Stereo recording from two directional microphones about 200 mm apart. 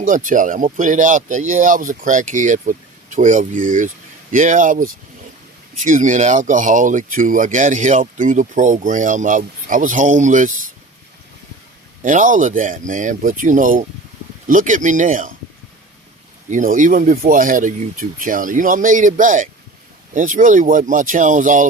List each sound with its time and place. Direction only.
0.0 s speech: 40° right (ahead or behind)
12.0 s speech: 40° right (ahead or behind)
16.5 s speech: 40° right (ahead or behind)